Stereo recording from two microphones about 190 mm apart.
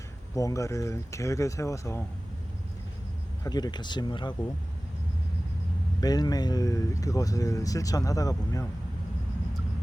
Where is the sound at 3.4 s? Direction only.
20° left (ahead or behind).